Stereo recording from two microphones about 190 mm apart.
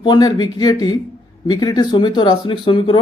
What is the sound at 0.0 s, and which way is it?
Speech, 20° left (ahead or behind).